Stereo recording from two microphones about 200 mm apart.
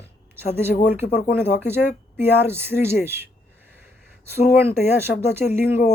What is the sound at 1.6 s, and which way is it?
Speech, 10° right (ahead or behind).